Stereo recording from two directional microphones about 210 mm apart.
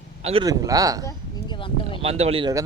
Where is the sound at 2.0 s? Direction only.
30° right (ahead or behind).